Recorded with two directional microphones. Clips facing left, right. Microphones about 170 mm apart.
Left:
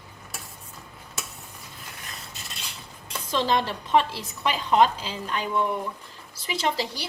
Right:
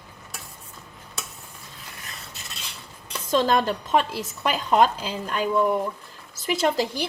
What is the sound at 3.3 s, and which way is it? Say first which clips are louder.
A woman's voice: right 4 dB; 45° right (ahead or behind).